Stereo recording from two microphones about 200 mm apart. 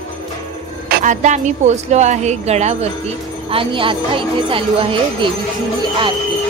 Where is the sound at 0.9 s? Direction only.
40° right (ahead or behind).